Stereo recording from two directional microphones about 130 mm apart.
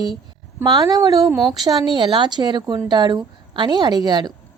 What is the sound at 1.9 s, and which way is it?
A woman's voice, 35° right (ahead or behind).